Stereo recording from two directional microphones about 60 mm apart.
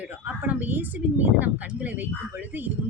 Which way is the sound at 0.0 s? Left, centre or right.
Right.